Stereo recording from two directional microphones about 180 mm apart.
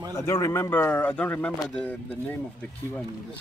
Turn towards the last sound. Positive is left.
turn(degrees=10)  # may be behind; listen again after turning